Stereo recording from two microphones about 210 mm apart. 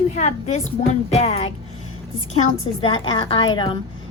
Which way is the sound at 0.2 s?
30° left (ahead or behind).